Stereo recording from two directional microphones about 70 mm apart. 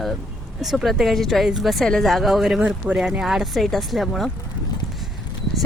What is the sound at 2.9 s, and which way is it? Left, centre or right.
Speech, right.